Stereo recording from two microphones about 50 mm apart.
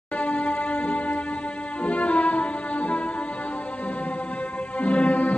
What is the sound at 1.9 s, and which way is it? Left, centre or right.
Music, left.